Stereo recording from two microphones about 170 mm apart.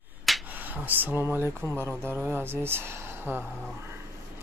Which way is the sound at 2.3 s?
15° right (ahead or behind).